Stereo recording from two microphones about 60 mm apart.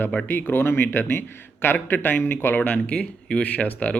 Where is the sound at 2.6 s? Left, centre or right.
Left.